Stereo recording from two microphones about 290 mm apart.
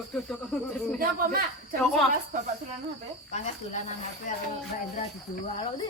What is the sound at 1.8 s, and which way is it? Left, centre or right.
Speech, centre.